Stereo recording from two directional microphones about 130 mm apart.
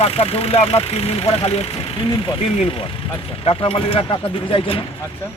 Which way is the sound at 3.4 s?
45° left (ahead or behind).